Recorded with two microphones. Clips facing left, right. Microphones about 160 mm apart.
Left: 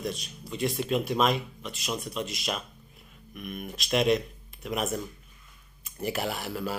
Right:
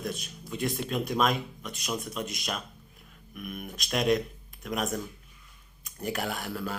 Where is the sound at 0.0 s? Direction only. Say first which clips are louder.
Left 1 dB; centre (ahead or behind).